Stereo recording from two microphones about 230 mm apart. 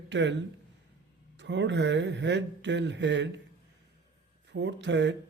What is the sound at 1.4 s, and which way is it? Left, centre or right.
Speech, right.